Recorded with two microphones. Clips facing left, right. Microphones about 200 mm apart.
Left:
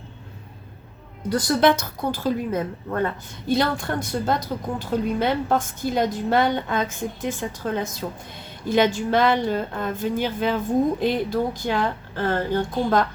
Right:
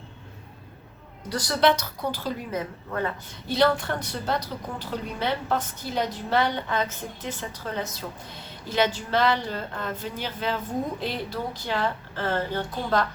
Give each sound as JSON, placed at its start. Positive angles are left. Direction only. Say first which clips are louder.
{"t": 1.5, "sound": "a woman's voice", "louder": "left 2 dB", "side_deg": 50}